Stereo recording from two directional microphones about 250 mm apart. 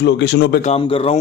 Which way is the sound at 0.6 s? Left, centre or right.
Left.